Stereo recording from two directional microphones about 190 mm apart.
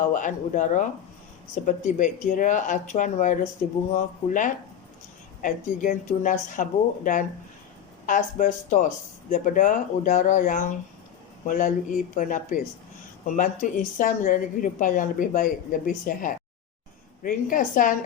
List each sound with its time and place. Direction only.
0.1 s a woman's voice: 40° left (ahead or behind)